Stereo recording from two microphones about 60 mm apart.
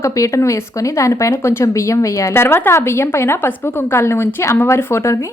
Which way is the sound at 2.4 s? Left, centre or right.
Left.